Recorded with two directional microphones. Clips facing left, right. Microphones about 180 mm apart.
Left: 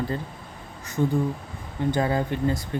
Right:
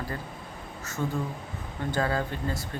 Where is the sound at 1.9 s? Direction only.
20° left (ahead or behind).